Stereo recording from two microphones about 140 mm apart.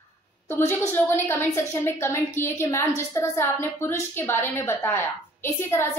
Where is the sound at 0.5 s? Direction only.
15° left (ahead or behind).